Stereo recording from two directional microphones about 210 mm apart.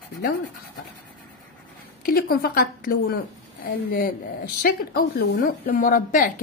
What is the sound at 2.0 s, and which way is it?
A woman's voice, 45° left (ahead or behind).